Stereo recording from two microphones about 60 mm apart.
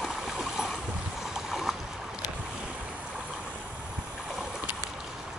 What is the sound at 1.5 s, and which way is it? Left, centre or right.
Boat, centre.